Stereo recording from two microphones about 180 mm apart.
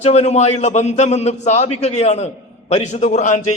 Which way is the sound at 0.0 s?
35° left (ahead or behind).